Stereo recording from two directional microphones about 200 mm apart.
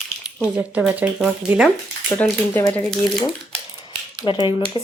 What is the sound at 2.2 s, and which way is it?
Speech, 10° left (ahead or behind).